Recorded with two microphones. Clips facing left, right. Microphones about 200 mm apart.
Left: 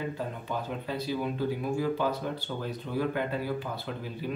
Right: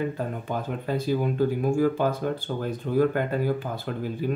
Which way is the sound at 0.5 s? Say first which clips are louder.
Right 5 dB; 50° right (ahead or behind).